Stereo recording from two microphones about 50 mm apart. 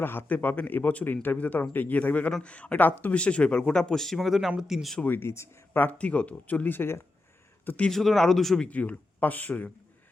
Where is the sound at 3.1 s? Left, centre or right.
Left; by 4.9 s centre.